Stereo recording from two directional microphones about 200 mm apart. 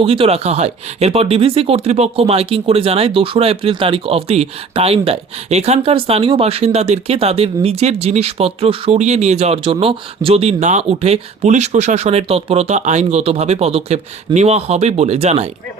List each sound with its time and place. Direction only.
0.0 s speech: 30° right (ahead or behind)